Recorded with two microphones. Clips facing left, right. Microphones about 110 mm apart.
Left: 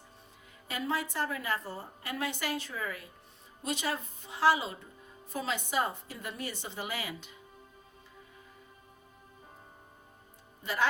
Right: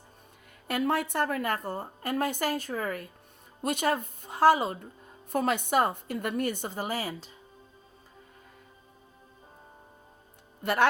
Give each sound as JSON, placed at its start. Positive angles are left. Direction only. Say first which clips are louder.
{"t": 0.7, "sound": "a woman's voice", "louder": "right 6 dB", "side_deg": -60}
{"t": 10.6, "sound": "speech", "louder": "right 6 dB", "side_deg": -65}